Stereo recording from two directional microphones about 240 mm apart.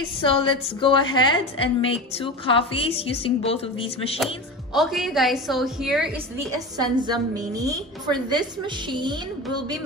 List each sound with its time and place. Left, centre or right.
0.2 s a woman's voice: left
4.7 s a woman's voice: centre
6.8 s a woman's voice: centre